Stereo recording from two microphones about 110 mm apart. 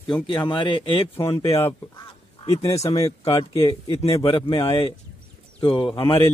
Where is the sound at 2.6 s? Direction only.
70° left (ahead or behind).